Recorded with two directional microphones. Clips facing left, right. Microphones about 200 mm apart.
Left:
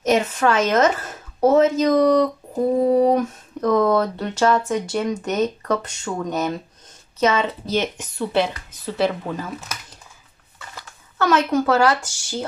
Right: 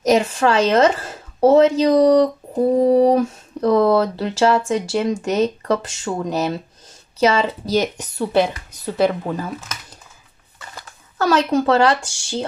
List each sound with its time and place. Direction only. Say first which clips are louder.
0.0 s a woman's voice: right 2 dB; 35° right (ahead or behind)
11.1 s speech: right 2 dB; 35° right (ahead or behind)